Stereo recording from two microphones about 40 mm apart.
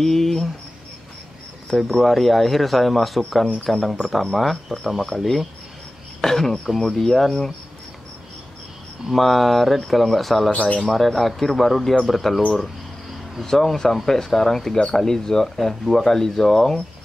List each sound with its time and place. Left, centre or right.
0.0 s speech: centre
1.7 s a man's voice: centre
9.1 s a man's voice: centre
10.5 s speech: left
10.9 s a man's voice: centre
12.4 s speech: left
13.4 s speech: centre